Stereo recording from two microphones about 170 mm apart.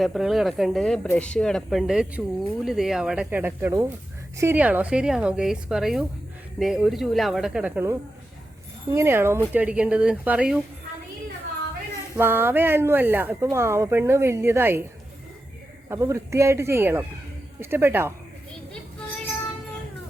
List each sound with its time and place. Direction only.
0.0 s a woman's voice: centre (ahead or behind)
12.1 s speech: 15° right (ahead or behind)
15.9 s speech: 15° right (ahead or behind)